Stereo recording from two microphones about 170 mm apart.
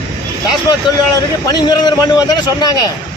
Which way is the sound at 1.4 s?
25° left (ahead or behind).